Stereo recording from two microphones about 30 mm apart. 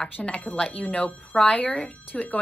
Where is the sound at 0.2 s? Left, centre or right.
Centre.